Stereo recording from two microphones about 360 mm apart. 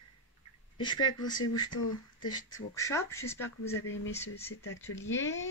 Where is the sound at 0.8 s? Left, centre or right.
Centre.